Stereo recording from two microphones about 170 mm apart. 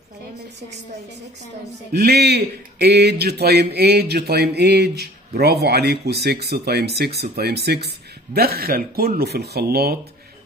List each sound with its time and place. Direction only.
1.9 s speech: 70° right (ahead or behind)